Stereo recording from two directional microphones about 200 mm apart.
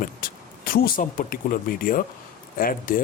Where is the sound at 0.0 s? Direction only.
45° left (ahead or behind).